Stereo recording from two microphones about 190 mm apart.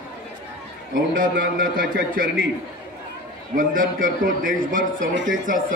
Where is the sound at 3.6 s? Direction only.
45° right (ahead or behind).